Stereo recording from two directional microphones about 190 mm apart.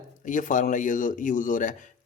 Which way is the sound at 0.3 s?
45° left (ahead or behind).